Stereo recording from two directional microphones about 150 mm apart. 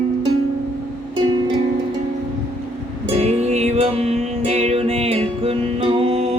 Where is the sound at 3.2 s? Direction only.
45° right (ahead or behind).